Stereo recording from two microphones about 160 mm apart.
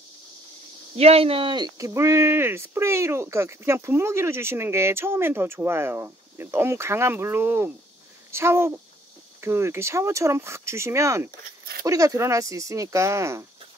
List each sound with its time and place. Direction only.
0.9 s speech: 40° right (ahead or behind); by 13.5 s 15° right (ahead or behind)